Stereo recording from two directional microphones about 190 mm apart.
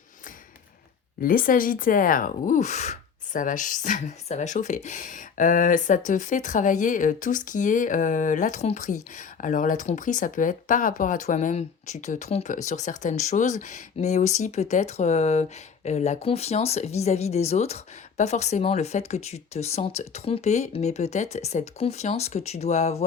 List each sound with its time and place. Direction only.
1.2 s speech: 50° left (ahead or behind)